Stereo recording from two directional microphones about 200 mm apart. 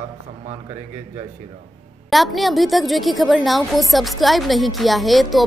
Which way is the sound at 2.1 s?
Centre (ahead or behind).